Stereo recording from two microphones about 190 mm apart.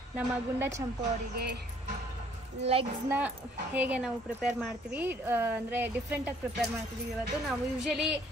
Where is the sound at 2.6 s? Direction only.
30° right (ahead or behind).